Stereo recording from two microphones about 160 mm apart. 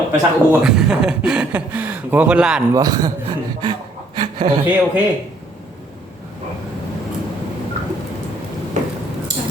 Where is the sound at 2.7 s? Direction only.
25° right (ahead or behind).